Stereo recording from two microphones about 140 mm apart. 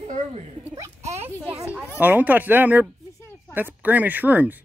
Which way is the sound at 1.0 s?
50° right (ahead or behind).